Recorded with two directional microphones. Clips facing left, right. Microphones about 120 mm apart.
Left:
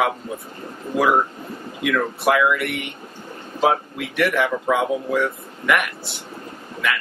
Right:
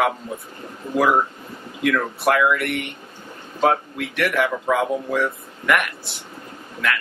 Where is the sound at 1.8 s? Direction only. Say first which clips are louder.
Even; centre (ahead or behind).